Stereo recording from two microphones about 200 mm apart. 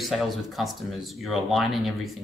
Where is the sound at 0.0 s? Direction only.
Centre (ahead or behind).